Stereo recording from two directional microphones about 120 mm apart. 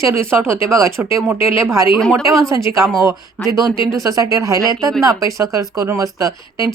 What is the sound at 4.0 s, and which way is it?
Speech, 30° right (ahead or behind).